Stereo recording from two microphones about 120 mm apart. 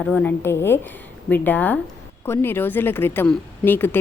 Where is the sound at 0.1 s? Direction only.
10° left (ahead or behind).